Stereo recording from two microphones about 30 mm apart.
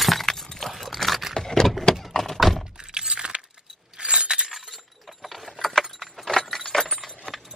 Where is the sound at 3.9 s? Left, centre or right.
Right.